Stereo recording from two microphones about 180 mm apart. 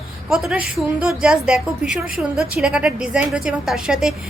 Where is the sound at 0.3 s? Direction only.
5° right (ahead or behind).